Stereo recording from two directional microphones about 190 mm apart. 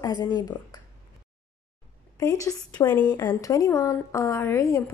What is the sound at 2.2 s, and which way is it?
A woman's voice, 15° left (ahead or behind).